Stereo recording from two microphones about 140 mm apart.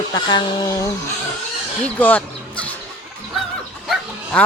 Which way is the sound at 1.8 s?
10° left (ahead or behind).